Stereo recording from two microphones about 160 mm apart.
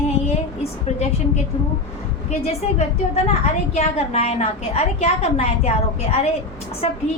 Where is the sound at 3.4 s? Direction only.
40° left (ahead or behind).